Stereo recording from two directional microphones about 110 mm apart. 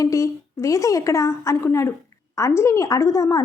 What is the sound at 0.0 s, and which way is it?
Speech, 30° left (ahead or behind).